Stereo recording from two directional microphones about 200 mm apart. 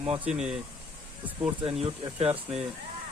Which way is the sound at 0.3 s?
35° right (ahead or behind).